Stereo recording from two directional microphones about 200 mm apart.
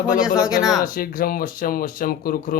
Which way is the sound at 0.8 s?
45° left (ahead or behind).